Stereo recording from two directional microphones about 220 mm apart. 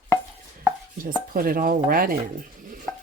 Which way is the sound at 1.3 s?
40° right (ahead or behind).